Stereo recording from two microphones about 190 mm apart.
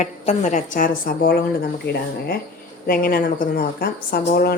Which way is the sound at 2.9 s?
50° left (ahead or behind).